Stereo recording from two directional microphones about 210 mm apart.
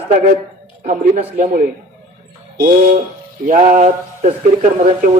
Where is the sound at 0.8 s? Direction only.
40° right (ahead or behind).